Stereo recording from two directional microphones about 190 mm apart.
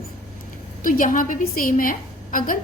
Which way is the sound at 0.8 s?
45° left (ahead or behind).